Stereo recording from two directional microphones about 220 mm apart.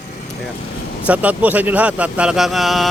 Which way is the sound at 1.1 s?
5° right (ahead or behind).